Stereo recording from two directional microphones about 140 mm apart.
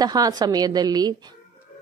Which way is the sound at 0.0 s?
25° right (ahead or behind).